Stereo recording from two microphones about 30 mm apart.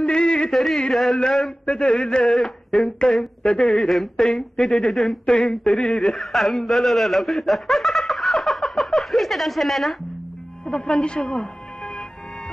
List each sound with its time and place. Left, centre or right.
0.0 s a sound: left
0.5 s a sound: centre
1.7 s speech: left
2.2 s speech: centre
2.7 s speech: left
6.1 s speech: centre
10.7 s a woman's voice: left